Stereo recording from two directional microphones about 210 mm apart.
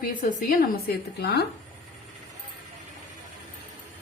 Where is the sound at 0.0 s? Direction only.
40° left (ahead or behind).